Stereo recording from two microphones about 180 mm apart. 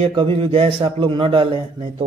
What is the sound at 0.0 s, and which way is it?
A man's voice, 30° right (ahead or behind).